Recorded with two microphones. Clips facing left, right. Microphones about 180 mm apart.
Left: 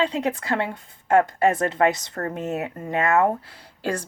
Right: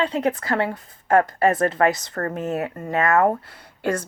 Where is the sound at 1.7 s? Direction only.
50° right (ahead or behind).